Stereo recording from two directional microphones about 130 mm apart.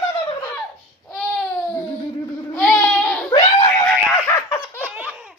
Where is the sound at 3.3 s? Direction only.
45° left (ahead or behind).